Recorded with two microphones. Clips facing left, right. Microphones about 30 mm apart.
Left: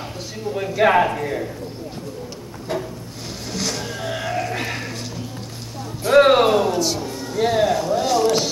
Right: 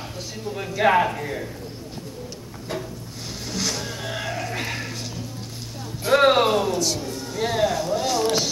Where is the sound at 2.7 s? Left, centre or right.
Centre.